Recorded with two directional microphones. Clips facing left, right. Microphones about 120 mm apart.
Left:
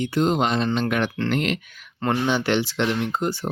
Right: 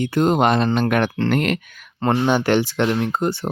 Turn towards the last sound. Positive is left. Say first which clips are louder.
# right 3 dB
turn(degrees=-55)  # may be behind; listen again after turning